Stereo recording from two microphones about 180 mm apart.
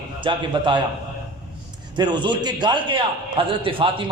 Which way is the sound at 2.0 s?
25° right (ahead or behind).